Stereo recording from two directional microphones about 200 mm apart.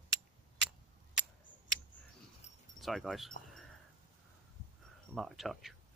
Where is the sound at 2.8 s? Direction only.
Centre (ahead or behind).